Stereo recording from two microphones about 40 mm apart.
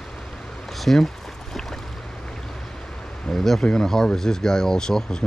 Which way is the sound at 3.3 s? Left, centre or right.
Centre.